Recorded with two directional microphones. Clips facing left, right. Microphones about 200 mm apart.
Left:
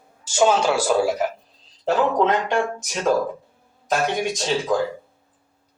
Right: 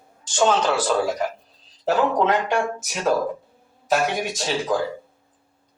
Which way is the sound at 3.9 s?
Centre (ahead or behind).